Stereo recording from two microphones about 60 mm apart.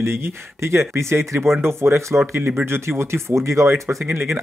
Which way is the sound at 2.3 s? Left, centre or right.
Right.